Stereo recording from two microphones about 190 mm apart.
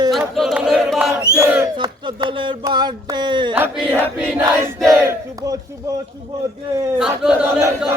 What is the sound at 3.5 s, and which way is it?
Speech, 10° right (ahead or behind).